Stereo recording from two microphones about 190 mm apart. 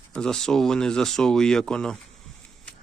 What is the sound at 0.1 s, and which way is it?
A man's voice, 5° left (ahead or behind).